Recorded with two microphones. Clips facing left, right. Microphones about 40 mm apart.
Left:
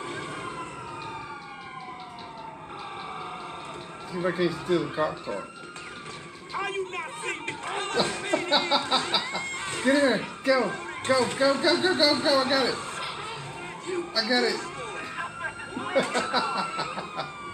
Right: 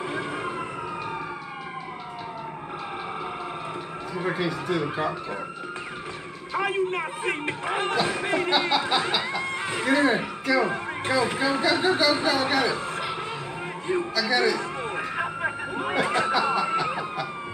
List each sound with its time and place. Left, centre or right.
0.0 s vehicle: centre
4.2 s speech: centre
6.5 s speech: centre
14.2 s a sound: centre